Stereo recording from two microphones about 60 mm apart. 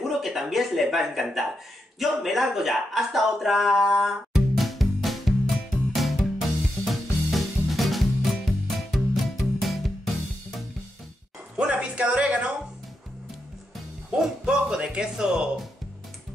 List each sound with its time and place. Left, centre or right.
0.2 s speech: centre
2.0 s a sound: centre
6.9 s music: centre
11.5 s music: centre
14.1 s speech: centre